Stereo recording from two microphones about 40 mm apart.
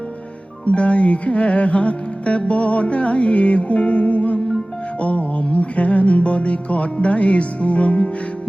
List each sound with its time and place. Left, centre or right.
0.6 s music: left